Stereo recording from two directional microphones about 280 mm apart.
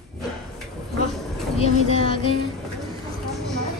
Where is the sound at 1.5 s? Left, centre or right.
Left.